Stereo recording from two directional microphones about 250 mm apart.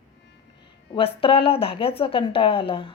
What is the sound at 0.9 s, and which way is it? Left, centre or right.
Speech, left.